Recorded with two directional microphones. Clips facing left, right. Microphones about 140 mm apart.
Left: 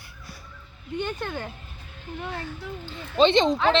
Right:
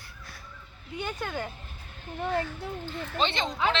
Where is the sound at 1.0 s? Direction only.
10° right (ahead or behind).